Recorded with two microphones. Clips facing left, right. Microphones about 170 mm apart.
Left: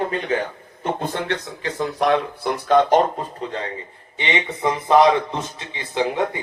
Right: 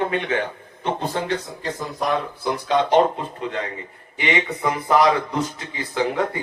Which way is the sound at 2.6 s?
45° left (ahead or behind).